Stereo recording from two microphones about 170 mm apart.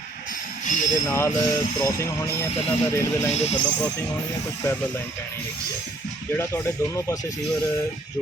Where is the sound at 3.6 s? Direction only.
20° left (ahead or behind).